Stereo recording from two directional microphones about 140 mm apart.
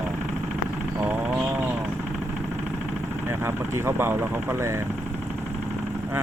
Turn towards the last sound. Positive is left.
turn(degrees=-15)  # may be behind; listen again after turning